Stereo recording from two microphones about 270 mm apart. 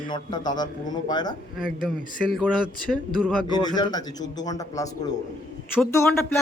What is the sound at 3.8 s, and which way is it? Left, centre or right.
A man's voice, centre.